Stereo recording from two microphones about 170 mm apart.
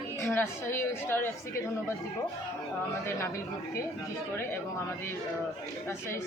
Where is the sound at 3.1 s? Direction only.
15° left (ahead or behind).